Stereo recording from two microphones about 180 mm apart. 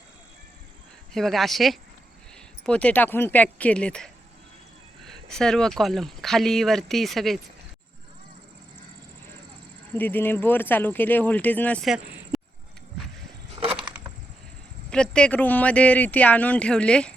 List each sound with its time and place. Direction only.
1.1 s speech: centre (ahead or behind)
10.0 s speech: 10° left (ahead or behind)
13.6 s a sound: 30° right (ahead or behind)
14.8 s speech: 5° left (ahead or behind)